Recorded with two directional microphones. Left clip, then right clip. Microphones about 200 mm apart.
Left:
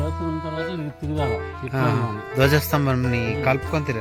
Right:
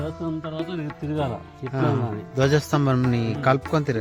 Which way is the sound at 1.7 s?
Centre (ahead or behind).